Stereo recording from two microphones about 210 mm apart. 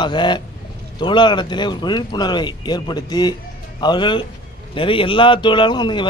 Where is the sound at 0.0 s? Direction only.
20° left (ahead or behind).